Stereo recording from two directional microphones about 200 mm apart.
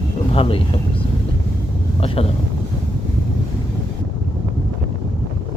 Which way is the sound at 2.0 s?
30° left (ahead or behind).